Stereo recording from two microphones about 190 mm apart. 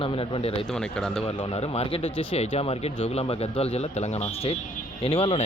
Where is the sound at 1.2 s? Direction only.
30° left (ahead or behind).